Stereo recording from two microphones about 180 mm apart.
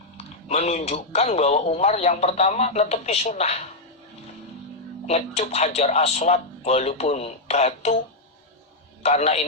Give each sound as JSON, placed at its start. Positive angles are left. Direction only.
{"t": 0.4, "sound": "speech", "side_deg": 40}
{"t": 5.0, "sound": "speech", "side_deg": 35}
{"t": 9.0, "sound": "speech", "side_deg": 35}